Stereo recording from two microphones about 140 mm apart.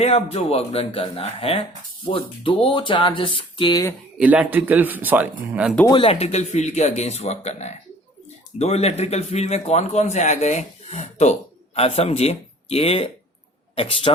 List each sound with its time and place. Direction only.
0.0 s a man's voice: 50° left (ahead or behind)
4.2 s speech: 10° right (ahead or behind)
5.9 s a man's voice: 40° left (ahead or behind)